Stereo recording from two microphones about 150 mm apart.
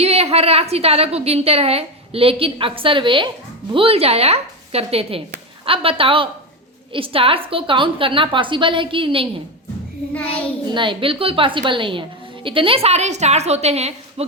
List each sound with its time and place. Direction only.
0.0 s a woman's voice: 45° right (ahead or behind)
10.8 s a woman's voice: 35° right (ahead or behind)